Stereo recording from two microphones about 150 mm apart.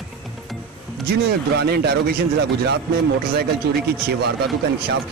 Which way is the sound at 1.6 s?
90° right.